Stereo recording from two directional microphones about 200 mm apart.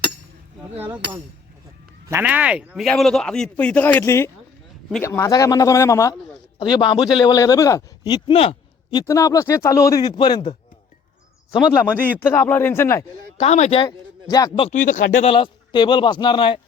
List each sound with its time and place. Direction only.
2.0 s a man's voice: 10° right (ahead or behind); by 10.6 s 25° left (ahead or behind)
11.7 s speech: 10° left (ahead or behind)
13.3 s a man's voice: 30° left (ahead or behind)
14.7 s speech: 40° left (ahead or behind)
15.1 s a man's voice: 30° left (ahead or behind)